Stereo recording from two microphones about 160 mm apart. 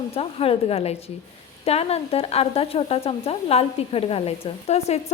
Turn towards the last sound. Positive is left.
turn(degrees=45)  # may be behind; listen again after turning